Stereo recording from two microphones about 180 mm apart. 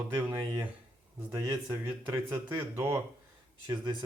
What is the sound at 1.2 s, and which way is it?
Speech, 15° right (ahead or behind).